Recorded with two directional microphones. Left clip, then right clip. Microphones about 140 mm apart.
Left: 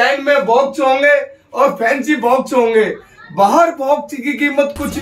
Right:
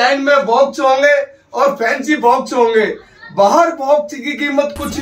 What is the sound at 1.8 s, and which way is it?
A man's voice, 10° left (ahead or behind).